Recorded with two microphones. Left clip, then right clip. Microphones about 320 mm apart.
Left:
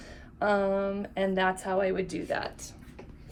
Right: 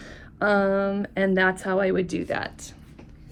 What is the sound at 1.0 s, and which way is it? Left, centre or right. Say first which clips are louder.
Speech: right 6 dB; right.